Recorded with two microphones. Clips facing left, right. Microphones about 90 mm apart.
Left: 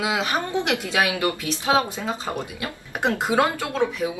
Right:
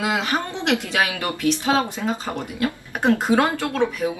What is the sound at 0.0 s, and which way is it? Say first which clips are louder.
Speech: right 1 dB; 20° left (ahead or behind).